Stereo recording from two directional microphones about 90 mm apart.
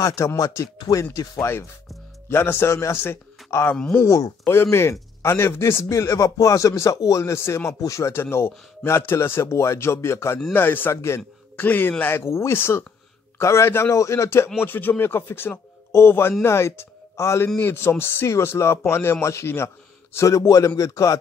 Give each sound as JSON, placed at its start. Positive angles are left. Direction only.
{"t": 0.0, "sound": "speech", "side_deg": 35}
{"t": 1.4, "sound": "a man's voice", "side_deg": 30}